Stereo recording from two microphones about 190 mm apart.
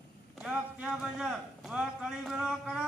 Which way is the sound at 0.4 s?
5° right (ahead or behind).